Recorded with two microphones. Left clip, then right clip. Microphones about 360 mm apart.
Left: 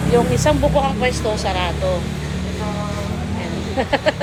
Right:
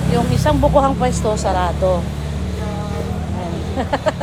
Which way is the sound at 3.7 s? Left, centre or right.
Centre.